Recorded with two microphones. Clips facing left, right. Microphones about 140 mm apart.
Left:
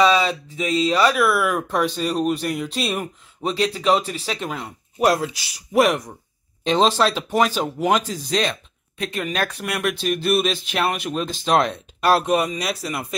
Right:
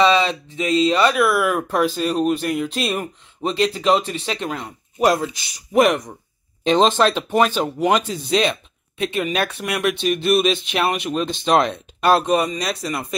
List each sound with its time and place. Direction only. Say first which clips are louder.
0.0 s speech: right 1 dB; 5° left (ahead or behind)